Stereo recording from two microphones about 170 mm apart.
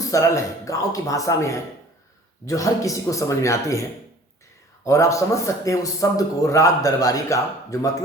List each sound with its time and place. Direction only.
0.0 s a man's voice: 20° left (ahead or behind)
4.9 s a man's voice: 20° left (ahead or behind)